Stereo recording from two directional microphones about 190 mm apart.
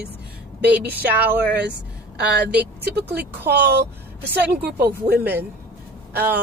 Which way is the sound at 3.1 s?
60° right (ahead or behind).